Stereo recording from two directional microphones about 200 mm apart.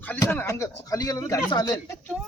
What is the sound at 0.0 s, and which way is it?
Speech, 10° left (ahead or behind).